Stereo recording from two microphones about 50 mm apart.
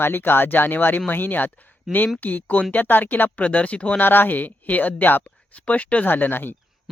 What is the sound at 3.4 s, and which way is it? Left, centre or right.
Speech, left.